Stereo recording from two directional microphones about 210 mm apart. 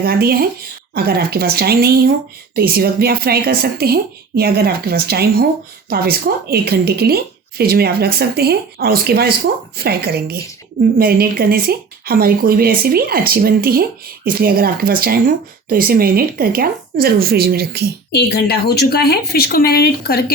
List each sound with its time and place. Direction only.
0.0 s speech: 45° right (ahead or behind)
18.1 s a woman's voice: 50° left (ahead or behind)